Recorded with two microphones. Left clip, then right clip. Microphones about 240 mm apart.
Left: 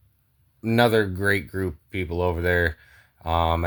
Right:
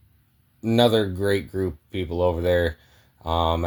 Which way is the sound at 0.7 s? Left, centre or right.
Left.